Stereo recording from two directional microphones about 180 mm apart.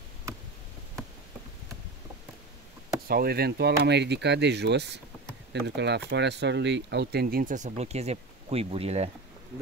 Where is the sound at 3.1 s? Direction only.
60° right (ahead or behind); by 9.1 s 35° right (ahead or behind).